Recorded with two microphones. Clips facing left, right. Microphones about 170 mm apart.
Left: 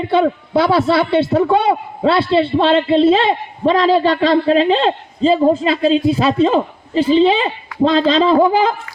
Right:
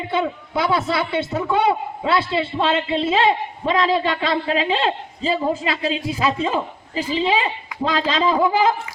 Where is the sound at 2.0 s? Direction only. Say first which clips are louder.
Left 7 dB; 30° left (ahead or behind).